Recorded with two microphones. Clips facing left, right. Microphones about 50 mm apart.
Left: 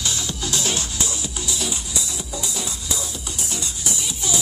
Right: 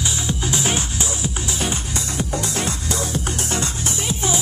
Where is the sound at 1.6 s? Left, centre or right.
Right.